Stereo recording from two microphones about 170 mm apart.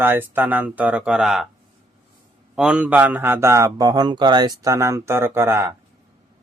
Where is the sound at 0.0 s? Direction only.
10° right (ahead or behind).